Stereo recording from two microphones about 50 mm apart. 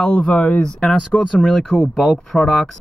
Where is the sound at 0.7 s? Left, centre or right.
Centre.